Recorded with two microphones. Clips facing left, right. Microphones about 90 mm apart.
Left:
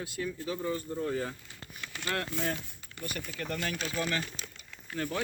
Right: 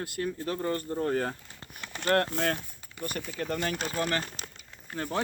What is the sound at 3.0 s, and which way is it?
Speech, 40° right (ahead or behind).